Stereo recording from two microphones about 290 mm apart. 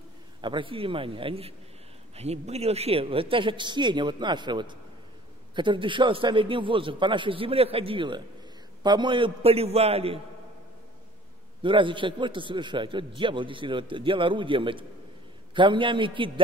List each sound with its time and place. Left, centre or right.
0.4 s a man's voice: centre
11.6 s a man's voice: centre